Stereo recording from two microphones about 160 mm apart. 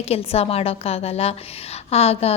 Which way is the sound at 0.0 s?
40° left (ahead or behind).